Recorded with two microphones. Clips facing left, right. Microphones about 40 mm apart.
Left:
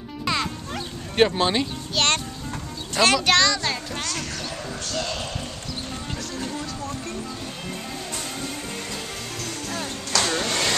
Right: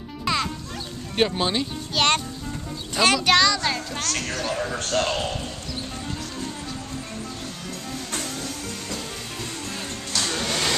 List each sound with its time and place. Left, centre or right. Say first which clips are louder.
0.2 s music: right 1 dB; centre
1.1 s speech: left 3 dB; centre
2.0 s music: right 2 dB; centre
2.9 s a child's voice: even; centre
4.0 s speech: right 2 dB; right
4.3 s speech: right 5 dB; right
10.3 s vacuum cleaner: left 1 dB; centre